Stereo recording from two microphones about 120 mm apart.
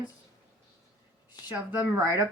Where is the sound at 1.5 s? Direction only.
15° right (ahead or behind).